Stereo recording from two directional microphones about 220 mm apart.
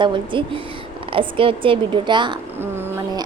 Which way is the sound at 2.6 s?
10° right (ahead or behind).